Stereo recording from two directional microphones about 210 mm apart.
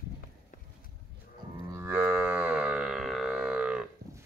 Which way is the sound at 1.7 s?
10° right (ahead or behind).